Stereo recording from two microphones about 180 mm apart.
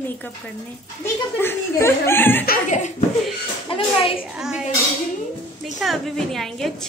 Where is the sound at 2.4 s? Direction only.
40° left (ahead or behind).